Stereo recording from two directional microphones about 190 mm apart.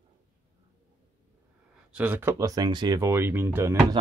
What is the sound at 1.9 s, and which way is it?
Speech, 5° right (ahead or behind).